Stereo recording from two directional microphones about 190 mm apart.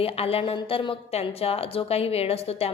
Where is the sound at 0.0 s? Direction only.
30° left (ahead or behind).